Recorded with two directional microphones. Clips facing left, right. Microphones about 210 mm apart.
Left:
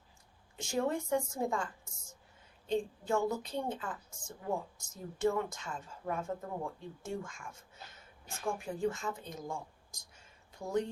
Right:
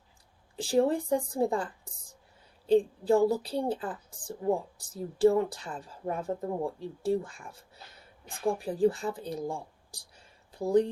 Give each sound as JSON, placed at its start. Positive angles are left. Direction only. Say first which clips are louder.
{"t": 0.5, "sound": "a woman's voice", "louder": "right 8 dB", "side_deg": -35}